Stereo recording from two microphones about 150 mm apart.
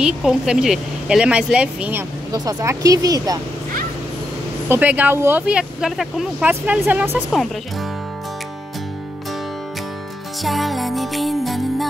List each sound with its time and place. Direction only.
0.0 s speech: 5° right (ahead or behind)
2.3 s speech: 20° right (ahead or behind)
4.6 s speech: 10° right (ahead or behind)
10.4 s speech: centre (ahead or behind)